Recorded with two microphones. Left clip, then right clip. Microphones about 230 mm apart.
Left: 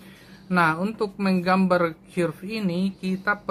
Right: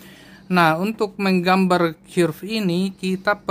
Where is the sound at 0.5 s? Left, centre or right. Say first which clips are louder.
Right 4 dB; right.